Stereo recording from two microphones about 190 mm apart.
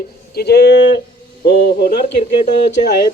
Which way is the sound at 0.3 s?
60° left (ahead or behind).